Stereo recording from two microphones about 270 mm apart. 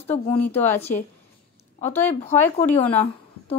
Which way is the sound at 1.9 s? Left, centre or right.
Centre.